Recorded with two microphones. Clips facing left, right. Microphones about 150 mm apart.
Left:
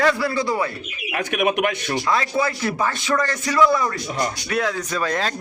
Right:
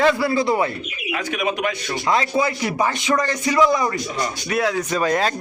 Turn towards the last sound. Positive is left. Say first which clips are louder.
# right 4 dB
turn(degrees=-10)  # may be behind; listen again after turning